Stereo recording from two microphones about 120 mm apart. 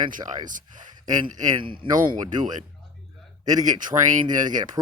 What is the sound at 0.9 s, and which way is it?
Speech, 45° right (ahead or behind).